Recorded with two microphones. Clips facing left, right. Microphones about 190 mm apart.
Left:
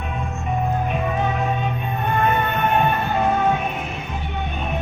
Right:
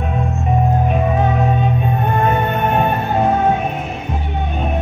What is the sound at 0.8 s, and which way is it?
Music, 40° right (ahead or behind).